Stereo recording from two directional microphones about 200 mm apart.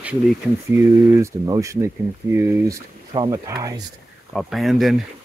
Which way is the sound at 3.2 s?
20° right (ahead or behind).